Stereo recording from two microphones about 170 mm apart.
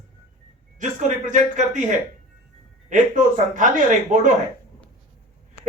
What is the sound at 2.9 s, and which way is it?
Speech, 50° right (ahead or behind).